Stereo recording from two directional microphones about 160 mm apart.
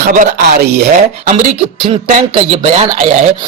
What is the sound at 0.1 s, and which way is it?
Speech, 55° right (ahead or behind).